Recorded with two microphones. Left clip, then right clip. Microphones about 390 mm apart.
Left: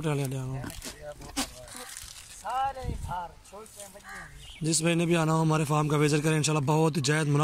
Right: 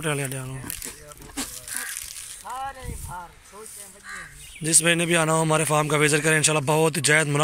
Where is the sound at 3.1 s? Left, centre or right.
Left.